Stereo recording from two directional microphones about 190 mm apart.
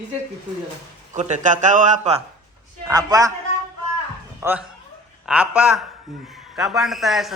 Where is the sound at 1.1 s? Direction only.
40° right (ahead or behind).